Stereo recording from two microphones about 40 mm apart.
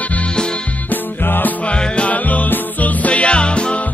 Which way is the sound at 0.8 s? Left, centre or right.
Left.